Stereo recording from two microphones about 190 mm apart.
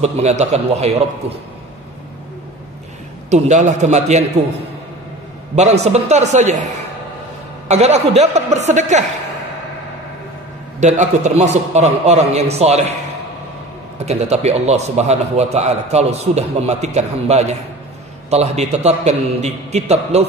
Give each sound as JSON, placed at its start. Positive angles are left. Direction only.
{"t": 0.0, "sound": "a man's voice", "side_deg": -35}
{"t": 3.3, "sound": "a man's voice", "side_deg": -40}
{"t": 5.6, "sound": "a man's voice", "side_deg": -35}
{"t": 7.6, "sound": "a man's voice", "side_deg": -35}
{"t": 10.8, "sound": "a man's voice", "side_deg": -35}
{"t": 13.9, "sound": "a man's voice", "side_deg": -35}